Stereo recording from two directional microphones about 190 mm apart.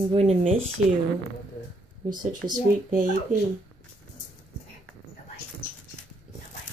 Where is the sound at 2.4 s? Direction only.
25° right (ahead or behind).